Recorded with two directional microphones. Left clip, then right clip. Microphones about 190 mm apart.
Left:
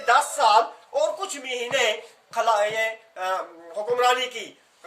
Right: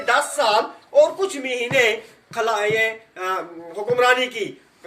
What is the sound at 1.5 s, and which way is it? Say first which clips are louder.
A man's voice: right 4 dB; 25° left (ahead or behind).